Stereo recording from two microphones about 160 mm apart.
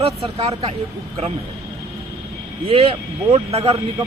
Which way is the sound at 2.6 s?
35° right (ahead or behind).